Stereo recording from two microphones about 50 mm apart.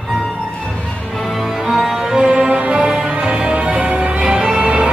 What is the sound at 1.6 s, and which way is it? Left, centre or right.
Music, centre.